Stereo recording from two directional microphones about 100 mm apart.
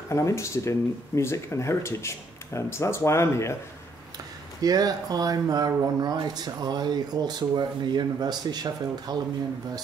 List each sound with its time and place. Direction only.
0.1 s speech: 30° left (ahead or behind)
4.6 s speech: 40° right (ahead or behind)